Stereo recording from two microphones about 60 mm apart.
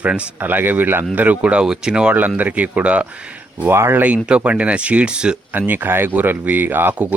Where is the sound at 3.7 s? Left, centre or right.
Right.